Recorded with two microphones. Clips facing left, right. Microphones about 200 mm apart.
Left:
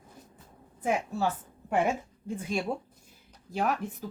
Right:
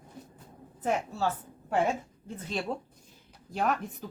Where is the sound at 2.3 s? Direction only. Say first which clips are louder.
Left 3 dB; 10° left (ahead or behind).